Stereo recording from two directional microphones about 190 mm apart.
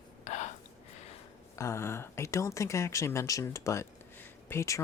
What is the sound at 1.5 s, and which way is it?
Speech, 15° left (ahead or behind).